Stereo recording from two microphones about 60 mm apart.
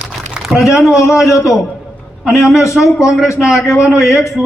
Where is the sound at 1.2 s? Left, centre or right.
Left.